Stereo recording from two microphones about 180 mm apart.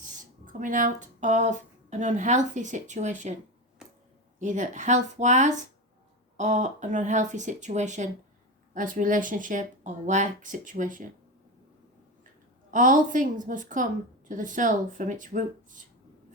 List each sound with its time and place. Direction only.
0.2 s speech: 45° right (ahead or behind)
4.4 s speech: 40° right (ahead or behind)
12.7 s speech: 45° right (ahead or behind)